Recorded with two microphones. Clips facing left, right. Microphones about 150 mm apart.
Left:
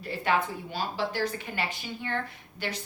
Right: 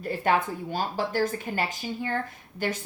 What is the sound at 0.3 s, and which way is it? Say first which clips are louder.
A woman's voice: right 2 dB; 45° right (ahead or behind).